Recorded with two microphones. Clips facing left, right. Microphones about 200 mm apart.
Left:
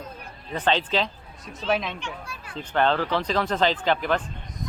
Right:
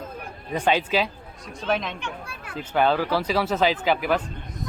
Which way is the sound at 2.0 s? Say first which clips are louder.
Right 1 dB; 55° right (ahead or behind).